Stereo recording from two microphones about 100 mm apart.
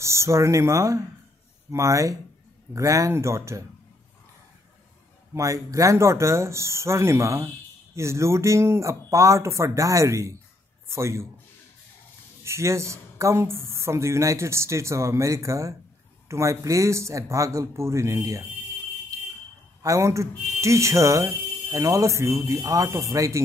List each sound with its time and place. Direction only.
0.0 s speech: 30° right (ahead or behind)
5.3 s speech: 30° right (ahead or behind)
12.4 s speech: 30° right (ahead or behind)
19.8 s speech: 30° right (ahead or behind)